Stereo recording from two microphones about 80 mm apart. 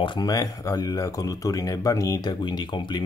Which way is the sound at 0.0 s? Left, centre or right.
Left.